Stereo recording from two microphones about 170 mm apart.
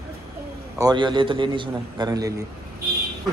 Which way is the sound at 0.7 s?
25° right (ahead or behind).